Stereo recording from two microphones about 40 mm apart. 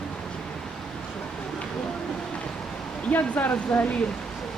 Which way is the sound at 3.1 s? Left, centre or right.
Left.